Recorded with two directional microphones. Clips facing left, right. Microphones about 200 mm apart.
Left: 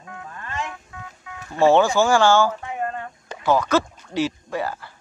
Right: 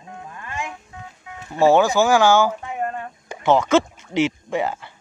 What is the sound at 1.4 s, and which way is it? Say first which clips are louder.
Speech: right 1 dB; 15° right (ahead or behind).